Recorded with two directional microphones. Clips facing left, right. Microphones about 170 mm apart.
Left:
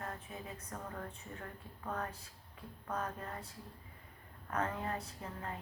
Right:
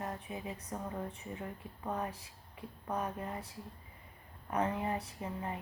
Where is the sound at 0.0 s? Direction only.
15° right (ahead or behind).